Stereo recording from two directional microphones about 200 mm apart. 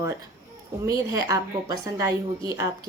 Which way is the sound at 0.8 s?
15° right (ahead or behind).